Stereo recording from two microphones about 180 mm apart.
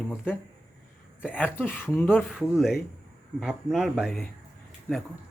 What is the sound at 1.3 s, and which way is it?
Speech, 10° left (ahead or behind).